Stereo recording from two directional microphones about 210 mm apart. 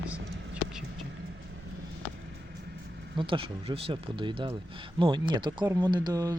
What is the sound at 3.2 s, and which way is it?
Speech, 25° right (ahead or behind).